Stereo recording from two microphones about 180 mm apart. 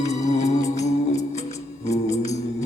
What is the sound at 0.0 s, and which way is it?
Music, 40° left (ahead or behind).